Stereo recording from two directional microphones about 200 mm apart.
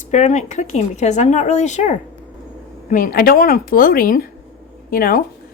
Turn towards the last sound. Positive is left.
turn(degrees=45)  # may be behind; listen again after turning